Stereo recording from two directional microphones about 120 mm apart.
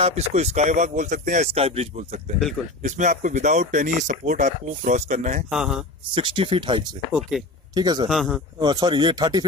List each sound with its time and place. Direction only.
0.0 s speech: 65° right (ahead or behind)
2.8 s speech: 90° right
5.5 s speech: 5° right (ahead or behind)
6.1 s speech: 45° right (ahead or behind)
7.1 s speech: centre (ahead or behind)
7.7 s speech: 35° right (ahead or behind)
8.1 s speech: centre (ahead or behind)
8.5 s speech: 35° right (ahead or behind)